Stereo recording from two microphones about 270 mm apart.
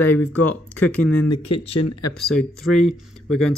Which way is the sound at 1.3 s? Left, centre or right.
Left.